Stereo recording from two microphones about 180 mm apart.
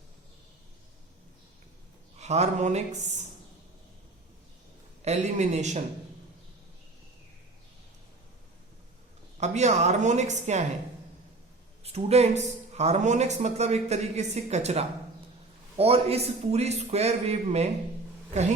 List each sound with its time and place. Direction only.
2.1 s speech: 40° right (ahead or behind)
5.0 s speech: 40° right (ahead or behind)
9.4 s speech: 40° right (ahead or behind)
11.8 s speech: 35° right (ahead or behind)